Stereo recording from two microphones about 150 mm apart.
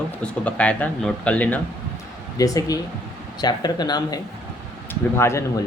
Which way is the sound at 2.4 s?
25° left (ahead or behind).